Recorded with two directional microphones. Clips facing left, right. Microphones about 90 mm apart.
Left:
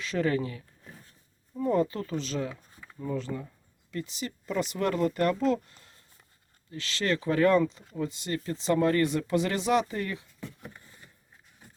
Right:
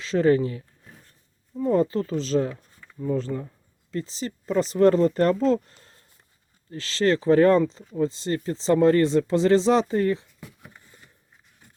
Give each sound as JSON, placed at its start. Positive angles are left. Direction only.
{"t": 0.0, "sound": "speech", "side_deg": -30}
{"t": 1.6, "sound": "speech", "side_deg": -30}